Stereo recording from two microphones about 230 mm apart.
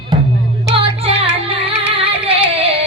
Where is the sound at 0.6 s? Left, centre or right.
Right.